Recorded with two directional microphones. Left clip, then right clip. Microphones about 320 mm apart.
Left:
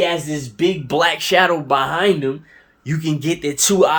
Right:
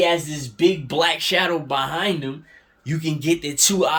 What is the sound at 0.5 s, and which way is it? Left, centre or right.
Speech, centre.